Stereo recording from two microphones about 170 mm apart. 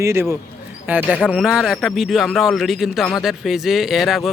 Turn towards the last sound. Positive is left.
turn(degrees=0)  # may be behind; listen again after turning